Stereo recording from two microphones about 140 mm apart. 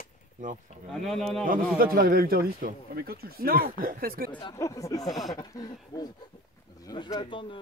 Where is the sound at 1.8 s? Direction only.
90° right.